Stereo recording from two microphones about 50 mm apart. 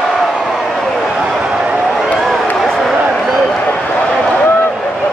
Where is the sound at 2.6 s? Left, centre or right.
Centre.